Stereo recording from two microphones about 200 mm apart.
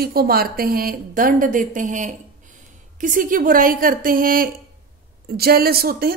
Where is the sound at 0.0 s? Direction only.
50° right (ahead or behind).